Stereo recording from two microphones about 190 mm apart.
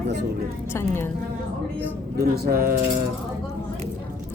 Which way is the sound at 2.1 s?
55° right (ahead or behind).